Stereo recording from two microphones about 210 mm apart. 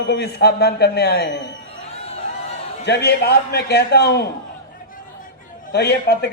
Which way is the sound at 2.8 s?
50° left (ahead or behind).